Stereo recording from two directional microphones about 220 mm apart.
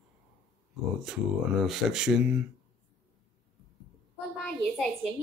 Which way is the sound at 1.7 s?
5° right (ahead or behind).